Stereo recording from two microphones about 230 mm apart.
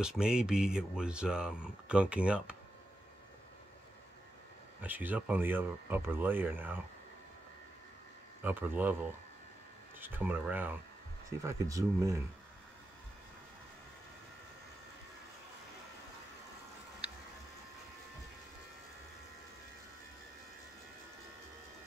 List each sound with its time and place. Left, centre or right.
0.0 s speech: centre
4.8 s speech: centre
8.5 s speech: centre
9.9 s speech: centre